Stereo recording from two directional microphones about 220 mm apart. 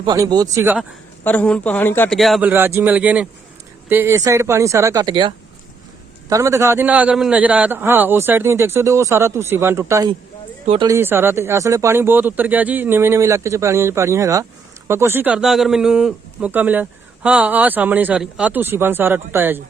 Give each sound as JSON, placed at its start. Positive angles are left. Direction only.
{"t": 0.0, "sound": "a man's voice", "side_deg": -20}
{"t": 1.2, "sound": "a man's voice", "side_deg": 5}